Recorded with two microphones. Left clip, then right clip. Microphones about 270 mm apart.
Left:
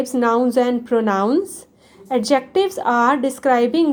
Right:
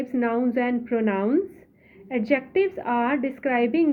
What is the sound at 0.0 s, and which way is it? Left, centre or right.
Speech, left.